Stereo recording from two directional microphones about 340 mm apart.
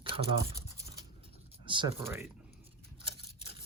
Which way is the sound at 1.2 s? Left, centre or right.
Centre.